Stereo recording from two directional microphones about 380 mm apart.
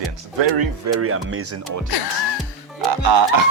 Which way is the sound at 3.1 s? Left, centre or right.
Right.